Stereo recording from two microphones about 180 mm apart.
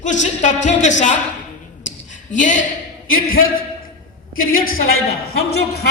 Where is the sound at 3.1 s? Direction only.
90° left.